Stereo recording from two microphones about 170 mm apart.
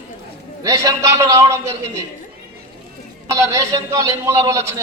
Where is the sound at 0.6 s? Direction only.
20° right (ahead or behind).